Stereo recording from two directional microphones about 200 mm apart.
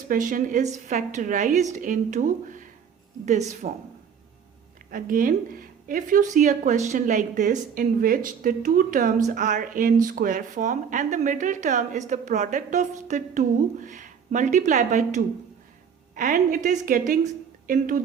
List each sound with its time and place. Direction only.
0.1 s speech: 45° right (ahead or behind)
4.9 s a woman's voice: 45° right (ahead or behind)